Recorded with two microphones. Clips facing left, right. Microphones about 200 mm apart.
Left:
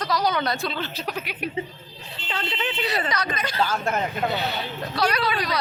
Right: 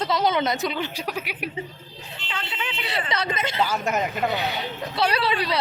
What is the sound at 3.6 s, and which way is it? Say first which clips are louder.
Speech: even; 10° right (ahead or behind).